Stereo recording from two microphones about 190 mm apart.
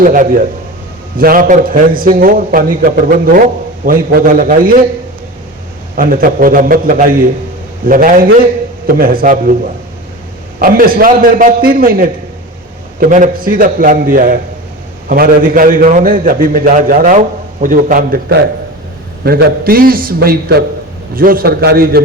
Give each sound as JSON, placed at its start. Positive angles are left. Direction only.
{"t": 0.0, "sound": "a man's voice", "side_deg": -45}
{"t": 6.0, "sound": "a man's voice", "side_deg": -45}
{"t": 10.6, "sound": "a man's voice", "side_deg": -50}